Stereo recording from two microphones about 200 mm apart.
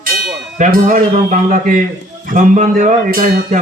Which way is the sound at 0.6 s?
40° right (ahead or behind).